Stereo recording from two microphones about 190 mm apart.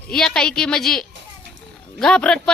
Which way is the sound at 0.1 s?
5° left (ahead or behind).